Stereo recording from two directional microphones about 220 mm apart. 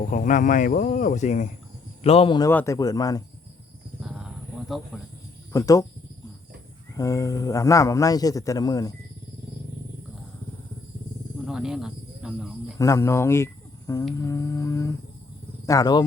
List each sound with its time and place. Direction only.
0.1 s speech: 35° left (ahead or behind)
2.5 s speech: 10° left (ahead or behind)
4.0 s a sound: 5° right (ahead or behind)
4.7 s speech: centre (ahead or behind)
5.5 s speech: 15° left (ahead or behind)
6.9 s speech: 15° left (ahead or behind)
11.4 s speech: centre (ahead or behind)
12.8 s speech: 15° left (ahead or behind)